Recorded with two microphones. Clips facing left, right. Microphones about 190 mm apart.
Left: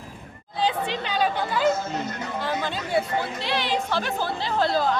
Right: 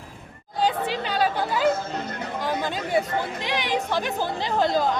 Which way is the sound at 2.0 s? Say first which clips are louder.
Even; 55° right (ahead or behind).